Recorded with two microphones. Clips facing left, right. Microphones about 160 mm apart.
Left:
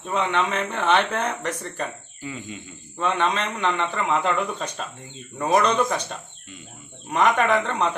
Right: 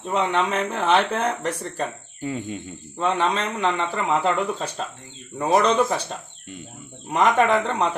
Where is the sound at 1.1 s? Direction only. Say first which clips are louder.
Right 2 dB; 30° right (ahead or behind).